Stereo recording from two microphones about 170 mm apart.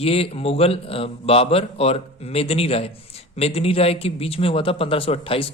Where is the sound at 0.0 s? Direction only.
35° left (ahead or behind).